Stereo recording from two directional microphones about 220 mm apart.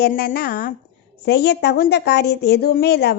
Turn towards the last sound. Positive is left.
turn(degrees=50)  # may be behind; listen again after turning